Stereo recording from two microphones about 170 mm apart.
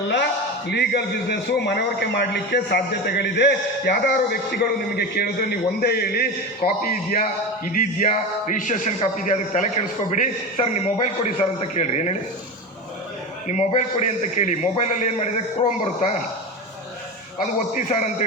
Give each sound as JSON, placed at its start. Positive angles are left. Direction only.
{"t": 0.7, "sound": "a man's voice", "side_deg": 80}
{"t": 13.5, "sound": "a man's voice", "side_deg": 45}
{"t": 17.4, "sound": "a man's voice", "side_deg": 50}